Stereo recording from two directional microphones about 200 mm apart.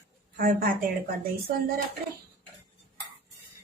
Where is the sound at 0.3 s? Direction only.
45° right (ahead or behind).